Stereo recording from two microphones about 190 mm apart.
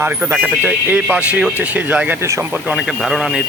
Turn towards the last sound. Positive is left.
turn(degrees=-5)  # may be behind; listen again after turning